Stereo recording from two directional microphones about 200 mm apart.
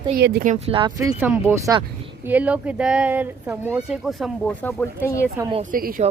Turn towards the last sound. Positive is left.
turn(degrees=-45)  # may be behind; listen again after turning